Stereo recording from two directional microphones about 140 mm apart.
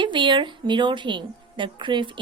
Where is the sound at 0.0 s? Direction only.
35° right (ahead or behind).